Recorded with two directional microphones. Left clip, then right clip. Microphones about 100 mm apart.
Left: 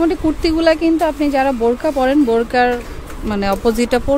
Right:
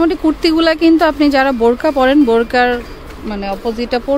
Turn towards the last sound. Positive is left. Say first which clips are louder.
# even
turn(degrees=20)  # may be behind; listen again after turning